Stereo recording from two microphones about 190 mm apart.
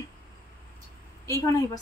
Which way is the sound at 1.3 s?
15° left (ahead or behind).